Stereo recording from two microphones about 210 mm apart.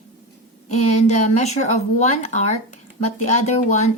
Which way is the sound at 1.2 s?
35° left (ahead or behind).